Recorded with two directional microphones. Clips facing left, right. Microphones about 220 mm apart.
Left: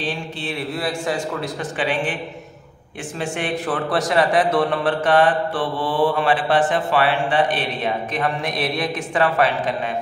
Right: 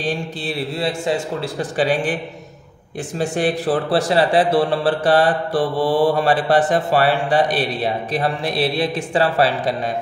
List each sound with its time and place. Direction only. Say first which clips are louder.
0.0 s a man's voice: right 3 dB; 40° right (ahead or behind)
0.7 s a man's voice: right 3 dB; 25° right (ahead or behind)
3.2 s a man's voice: right 5 dB; 35° right (ahead or behind)